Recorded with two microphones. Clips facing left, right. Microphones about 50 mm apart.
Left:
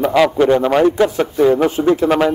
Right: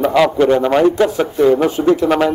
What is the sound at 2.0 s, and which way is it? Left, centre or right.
Speech, centre.